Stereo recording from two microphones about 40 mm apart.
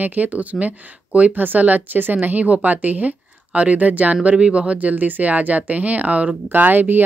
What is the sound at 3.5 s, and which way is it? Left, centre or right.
Speech, right.